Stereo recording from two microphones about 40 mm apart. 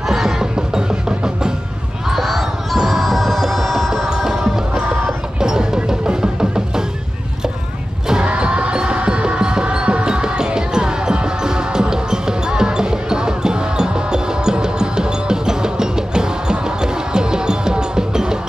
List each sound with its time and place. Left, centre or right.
0.1 s music: centre
2.0 s music: centre
4.1 s music: centre
5.4 s music: centre
8.1 s music: right